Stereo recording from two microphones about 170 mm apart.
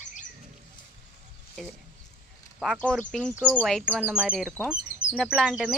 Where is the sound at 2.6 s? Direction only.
Centre (ahead or behind).